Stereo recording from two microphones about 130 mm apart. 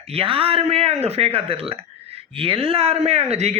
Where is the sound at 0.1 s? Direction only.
45° right (ahead or behind).